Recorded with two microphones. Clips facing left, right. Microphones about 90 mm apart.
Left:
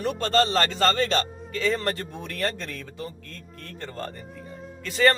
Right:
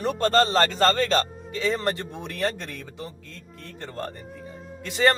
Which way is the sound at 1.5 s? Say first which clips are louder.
Even; 20° right (ahead or behind).